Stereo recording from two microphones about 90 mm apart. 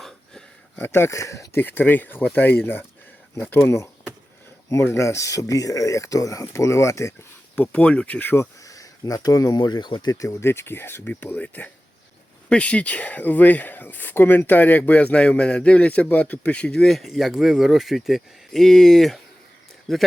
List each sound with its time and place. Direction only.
0.8 s speech: 25° left (ahead or behind)
1.6 s speech: 20° left (ahead or behind)
4.7 s speech: 30° left (ahead or behind)
7.5 s speech: 15° left (ahead or behind)
8.6 s speech: 40° left (ahead or behind); by 20.0 s centre (ahead or behind)